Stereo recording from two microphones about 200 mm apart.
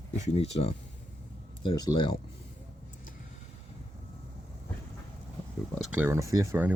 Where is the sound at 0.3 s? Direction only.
30° left (ahead or behind).